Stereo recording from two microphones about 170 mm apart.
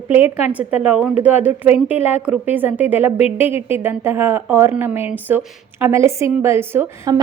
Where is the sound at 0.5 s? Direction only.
10° right (ahead or behind).